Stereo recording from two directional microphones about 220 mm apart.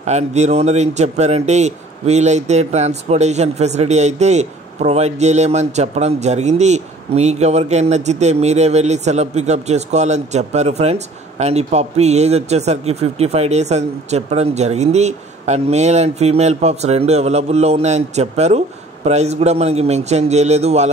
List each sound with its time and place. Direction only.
0.0 s a man's voice: 30° right (ahead or behind)